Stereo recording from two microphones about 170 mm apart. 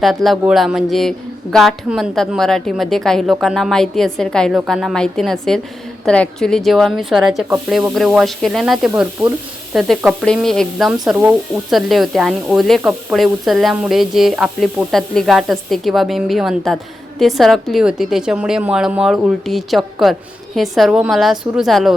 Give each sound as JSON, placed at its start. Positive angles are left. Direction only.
{"t": 0.0, "sound": "speech", "side_deg": 0}